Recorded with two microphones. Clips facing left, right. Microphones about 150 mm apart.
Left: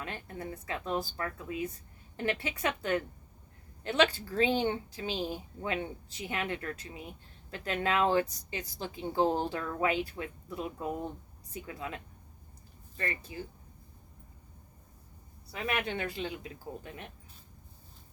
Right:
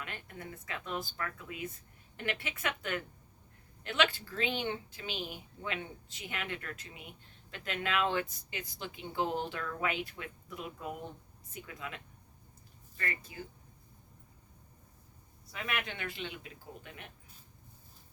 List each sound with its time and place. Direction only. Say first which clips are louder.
0.0 s speech: left 5 dB; 30° left (ahead or behind)
13.0 s speech: left 3 dB; 30° left (ahead or behind)
15.5 s speech: left 5 dB; 30° left (ahead or behind)